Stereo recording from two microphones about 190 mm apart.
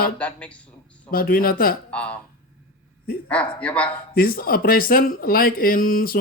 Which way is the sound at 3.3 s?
5° left (ahead or behind).